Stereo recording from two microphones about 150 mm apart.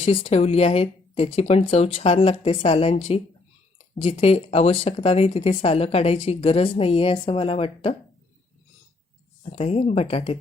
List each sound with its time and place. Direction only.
0.0 s speech: 40° left (ahead or behind)
9.4 s speech: 45° left (ahead or behind)